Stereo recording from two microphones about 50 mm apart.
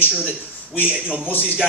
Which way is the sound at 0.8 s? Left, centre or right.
Right.